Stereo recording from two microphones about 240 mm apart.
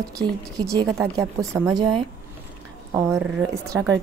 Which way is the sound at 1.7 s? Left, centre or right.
Right.